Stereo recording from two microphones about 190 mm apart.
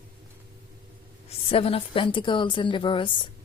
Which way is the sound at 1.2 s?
30° left (ahead or behind).